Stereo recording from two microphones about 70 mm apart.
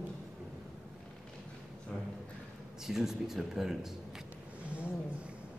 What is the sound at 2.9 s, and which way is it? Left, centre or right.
Speech, centre.